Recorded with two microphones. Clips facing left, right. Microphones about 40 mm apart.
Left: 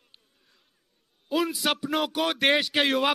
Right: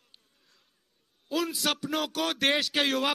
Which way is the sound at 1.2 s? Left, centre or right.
Centre.